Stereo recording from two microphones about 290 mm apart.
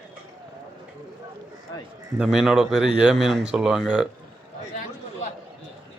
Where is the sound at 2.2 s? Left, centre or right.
Centre.